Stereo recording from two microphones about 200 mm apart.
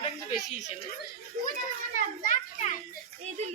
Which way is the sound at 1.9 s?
40° left (ahead or behind).